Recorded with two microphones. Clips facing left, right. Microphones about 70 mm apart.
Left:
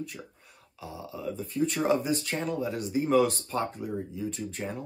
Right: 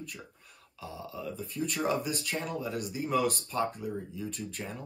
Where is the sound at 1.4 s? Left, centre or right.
Left.